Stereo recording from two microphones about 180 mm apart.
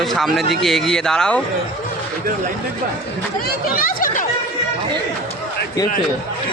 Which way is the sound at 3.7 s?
55° left (ahead or behind).